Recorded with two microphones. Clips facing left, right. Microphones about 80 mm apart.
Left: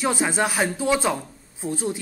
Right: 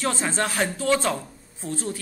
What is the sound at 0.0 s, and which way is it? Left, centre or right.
Speech, centre.